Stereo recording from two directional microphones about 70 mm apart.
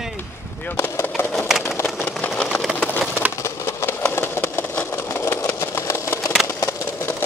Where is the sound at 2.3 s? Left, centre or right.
Centre.